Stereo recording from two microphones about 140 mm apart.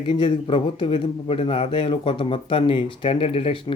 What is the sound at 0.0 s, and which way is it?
A man's voice, 35° left (ahead or behind).